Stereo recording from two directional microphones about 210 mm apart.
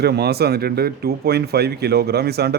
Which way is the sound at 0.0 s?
50° right (ahead or behind).